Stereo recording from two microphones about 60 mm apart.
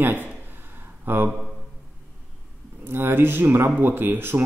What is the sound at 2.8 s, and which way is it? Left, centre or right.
Speech, right.